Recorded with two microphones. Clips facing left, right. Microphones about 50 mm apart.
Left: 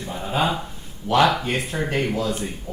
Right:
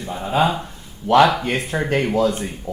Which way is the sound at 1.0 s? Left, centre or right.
Right.